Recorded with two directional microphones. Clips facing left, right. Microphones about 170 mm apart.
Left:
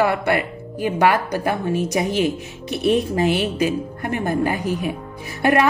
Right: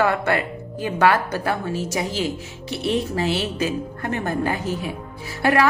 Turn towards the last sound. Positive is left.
turn(degrees=20)  # may be behind; listen again after turning